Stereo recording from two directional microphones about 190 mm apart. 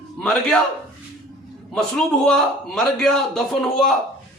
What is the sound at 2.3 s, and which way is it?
A man's voice, centre (ahead or behind).